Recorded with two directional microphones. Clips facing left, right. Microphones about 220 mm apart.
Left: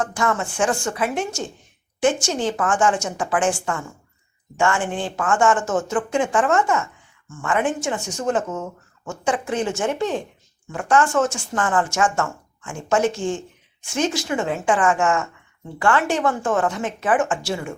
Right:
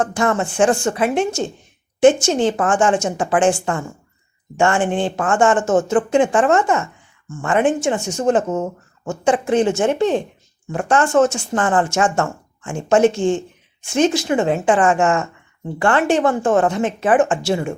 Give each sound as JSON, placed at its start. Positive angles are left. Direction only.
{"t": 0.0, "sound": "speech", "side_deg": -25}
{"t": 9.2, "sound": "speech", "side_deg": -25}